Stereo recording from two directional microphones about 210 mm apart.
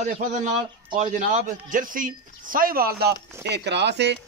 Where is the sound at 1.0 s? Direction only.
35° right (ahead or behind); by 4.1 s 55° right (ahead or behind).